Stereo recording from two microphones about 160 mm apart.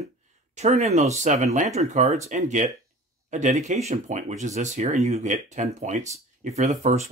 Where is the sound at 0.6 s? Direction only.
45° right (ahead or behind).